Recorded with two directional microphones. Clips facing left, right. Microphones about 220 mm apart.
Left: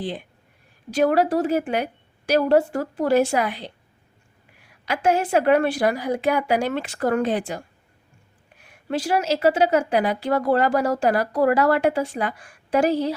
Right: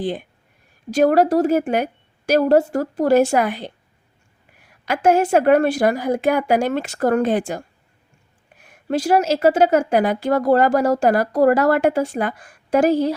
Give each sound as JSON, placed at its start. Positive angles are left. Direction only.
{"t": 0.9, "sound": "a woman's voice", "side_deg": -45}